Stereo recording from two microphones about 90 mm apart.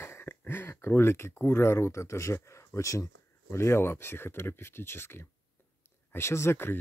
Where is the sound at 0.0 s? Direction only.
25° left (ahead or behind).